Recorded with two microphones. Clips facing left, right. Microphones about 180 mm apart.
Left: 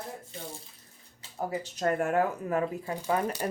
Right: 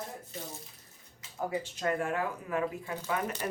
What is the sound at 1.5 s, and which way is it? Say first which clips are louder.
Speech: left 3 dB; 45° left (ahead or behind).